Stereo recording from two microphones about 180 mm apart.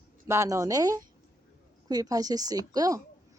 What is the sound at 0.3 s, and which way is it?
Speech, 15° right (ahead or behind).